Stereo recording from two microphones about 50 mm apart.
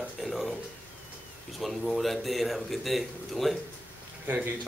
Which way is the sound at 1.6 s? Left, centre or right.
Centre.